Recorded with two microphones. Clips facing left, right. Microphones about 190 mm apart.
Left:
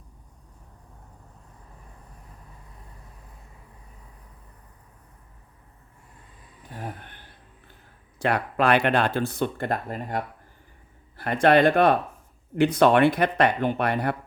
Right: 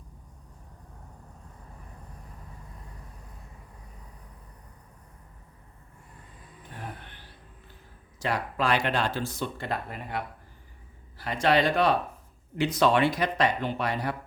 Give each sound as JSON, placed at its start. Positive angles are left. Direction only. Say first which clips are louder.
{"t": 6.7, "sound": "a sound", "louder": "left 4 dB", "side_deg": 50}
{"t": 8.2, "sound": "speech", "louder": "left 5 dB", "side_deg": 60}
{"t": 11.2, "sound": "speech", "louder": "left 6 dB", "side_deg": 55}